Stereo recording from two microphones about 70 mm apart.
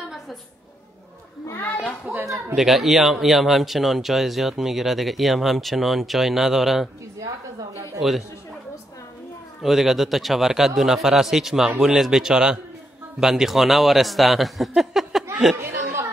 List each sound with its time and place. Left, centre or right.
2.1 s speech: right
2.5 s speech: centre
8.0 s speech: centre
9.6 s speech: centre
14.8 s a sound: centre
15.6 s chatter: right